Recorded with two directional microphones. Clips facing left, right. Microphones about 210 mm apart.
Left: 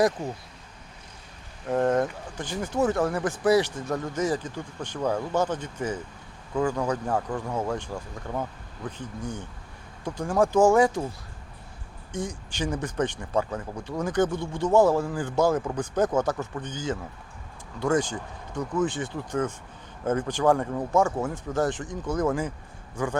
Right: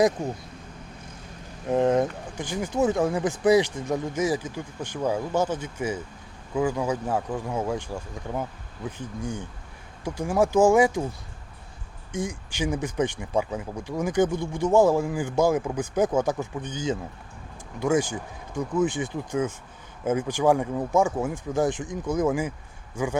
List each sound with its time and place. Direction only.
1.7 s speech: 15° right (ahead or behind)
12.1 s speech: 10° right (ahead or behind)